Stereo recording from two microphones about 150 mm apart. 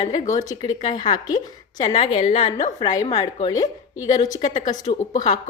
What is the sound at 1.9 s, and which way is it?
Speech, 35° left (ahead or behind).